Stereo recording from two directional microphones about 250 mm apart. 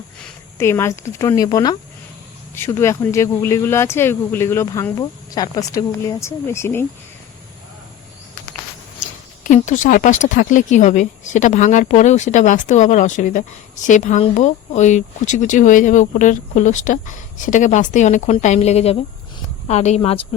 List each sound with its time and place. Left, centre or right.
0.6 s speech: centre
9.0 s speech: left